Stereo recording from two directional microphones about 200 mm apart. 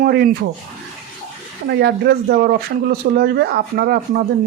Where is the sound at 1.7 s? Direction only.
55° right (ahead or behind).